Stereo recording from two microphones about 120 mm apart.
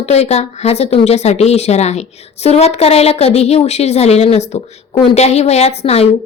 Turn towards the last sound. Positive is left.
turn(degrees=60)  # may be behind; listen again after turning